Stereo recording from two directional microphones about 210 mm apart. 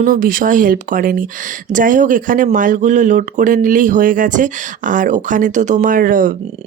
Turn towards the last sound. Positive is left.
turn(degrees=-40)  # may be behind; listen again after turning